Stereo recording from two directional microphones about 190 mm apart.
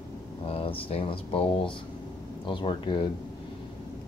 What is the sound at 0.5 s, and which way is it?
Speech, 30° left (ahead or behind).